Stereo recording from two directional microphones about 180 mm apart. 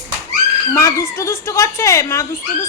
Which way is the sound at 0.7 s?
15° left (ahead or behind).